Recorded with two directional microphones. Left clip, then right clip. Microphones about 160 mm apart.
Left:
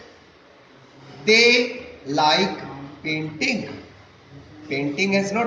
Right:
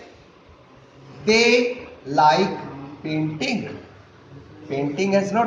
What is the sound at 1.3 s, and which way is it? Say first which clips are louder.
A man's voice: left 1 dB; 40° right (ahead or behind).